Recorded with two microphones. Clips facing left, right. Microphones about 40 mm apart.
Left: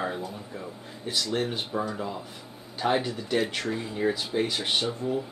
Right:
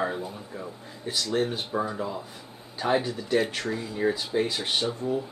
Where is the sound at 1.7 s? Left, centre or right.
Centre.